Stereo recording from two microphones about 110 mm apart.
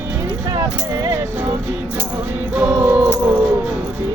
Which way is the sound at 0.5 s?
35° right (ahead or behind).